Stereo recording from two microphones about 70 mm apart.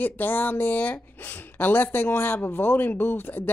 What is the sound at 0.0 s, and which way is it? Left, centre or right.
Speech, left.